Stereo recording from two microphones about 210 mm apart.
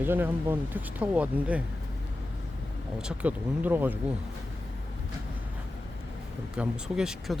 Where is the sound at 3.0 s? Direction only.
5° right (ahead or behind).